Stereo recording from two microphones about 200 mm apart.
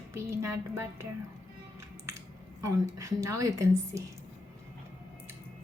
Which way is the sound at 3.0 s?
15° right (ahead or behind).